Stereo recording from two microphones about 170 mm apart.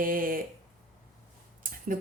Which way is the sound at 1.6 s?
55° right (ahead or behind).